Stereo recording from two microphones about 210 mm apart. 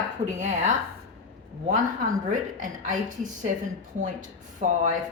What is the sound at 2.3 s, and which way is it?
Speech, 40° right (ahead or behind).